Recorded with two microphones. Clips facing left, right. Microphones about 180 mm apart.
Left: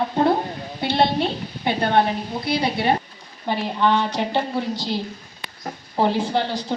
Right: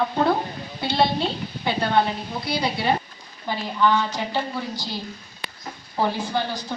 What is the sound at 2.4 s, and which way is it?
Speech, 55° left (ahead or behind).